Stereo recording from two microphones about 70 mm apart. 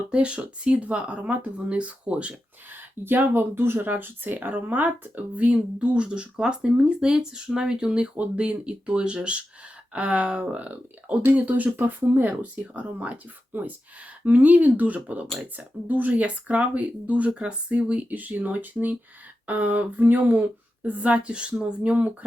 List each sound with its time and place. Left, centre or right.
0.1 s speech: centre
3.0 s speech: right